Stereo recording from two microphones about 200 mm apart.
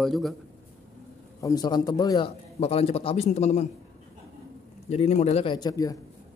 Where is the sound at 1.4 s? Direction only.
15° left (ahead or behind).